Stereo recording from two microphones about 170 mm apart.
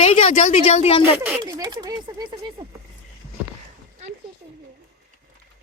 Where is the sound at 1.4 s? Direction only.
20° right (ahead or behind).